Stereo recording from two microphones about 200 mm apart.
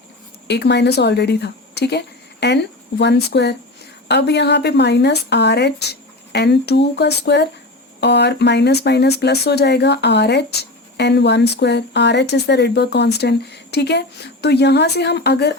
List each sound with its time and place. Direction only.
0.4 s speech: 55° left (ahead or behind)